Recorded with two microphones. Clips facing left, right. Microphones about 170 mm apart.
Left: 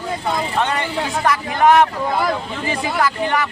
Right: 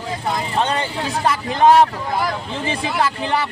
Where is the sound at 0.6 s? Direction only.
30° right (ahead or behind).